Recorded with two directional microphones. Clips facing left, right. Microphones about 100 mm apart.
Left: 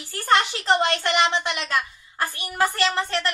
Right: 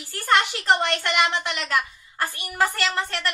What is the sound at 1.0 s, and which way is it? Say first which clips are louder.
Speech: left 2 dB; 25° left (ahead or behind).